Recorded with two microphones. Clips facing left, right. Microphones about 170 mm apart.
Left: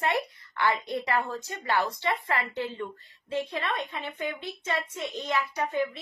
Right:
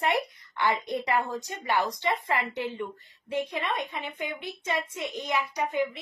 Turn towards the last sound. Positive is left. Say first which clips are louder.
# even
turn(degrees=-15)  # may be behind; listen again after turning